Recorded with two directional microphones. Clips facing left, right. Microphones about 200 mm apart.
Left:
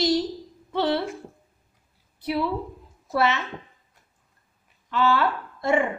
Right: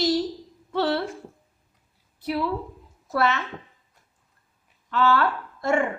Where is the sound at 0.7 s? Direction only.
20° left (ahead or behind).